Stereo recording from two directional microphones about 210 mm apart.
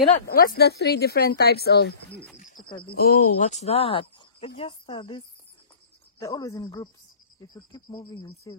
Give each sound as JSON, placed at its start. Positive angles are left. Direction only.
{"t": 0.3, "sound": "speech", "side_deg": 45}
{"t": 2.3, "sound": "a sound", "side_deg": 35}
{"t": 2.9, "sound": "speech", "side_deg": 45}